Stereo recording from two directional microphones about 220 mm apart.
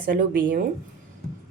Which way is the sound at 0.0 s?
40° right (ahead or behind).